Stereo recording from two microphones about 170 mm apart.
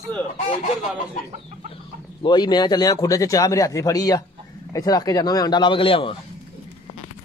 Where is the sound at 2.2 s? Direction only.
25° left (ahead or behind).